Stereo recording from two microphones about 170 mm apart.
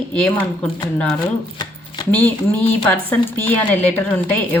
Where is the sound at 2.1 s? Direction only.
10° left (ahead or behind).